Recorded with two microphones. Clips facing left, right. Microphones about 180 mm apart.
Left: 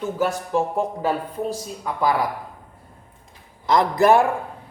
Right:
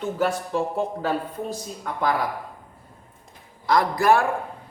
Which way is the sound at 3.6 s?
20° left (ahead or behind).